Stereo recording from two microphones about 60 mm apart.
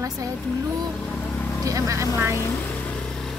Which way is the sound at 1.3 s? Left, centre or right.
Left.